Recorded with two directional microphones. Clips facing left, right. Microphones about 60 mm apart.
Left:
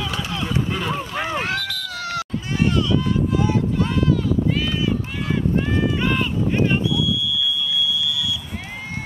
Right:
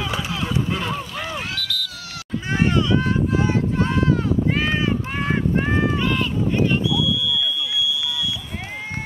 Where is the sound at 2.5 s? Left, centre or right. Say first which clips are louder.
Right 1 dB; right.